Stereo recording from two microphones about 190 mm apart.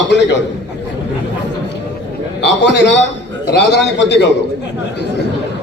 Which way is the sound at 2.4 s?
65° left (ahead or behind).